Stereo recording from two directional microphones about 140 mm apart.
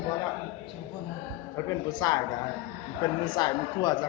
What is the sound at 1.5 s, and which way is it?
A woman's voice, 25° left (ahead or behind).